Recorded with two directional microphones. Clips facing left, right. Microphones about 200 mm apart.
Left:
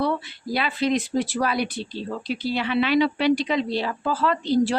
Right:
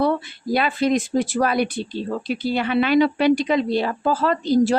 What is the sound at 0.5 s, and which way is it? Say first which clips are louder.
Speech: right 4 dB; 50° right (ahead or behind).